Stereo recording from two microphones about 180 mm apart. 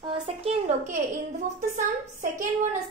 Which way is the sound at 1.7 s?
45° right (ahead or behind).